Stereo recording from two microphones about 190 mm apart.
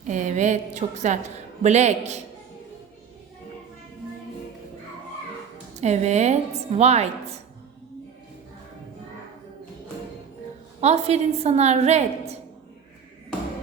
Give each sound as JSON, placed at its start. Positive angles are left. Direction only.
{"t": 0.1, "sound": "a woman's voice", "side_deg": -40}
{"t": 5.8, "sound": "a woman's voice", "side_deg": -35}
{"t": 10.8, "sound": "a woman's voice", "side_deg": -35}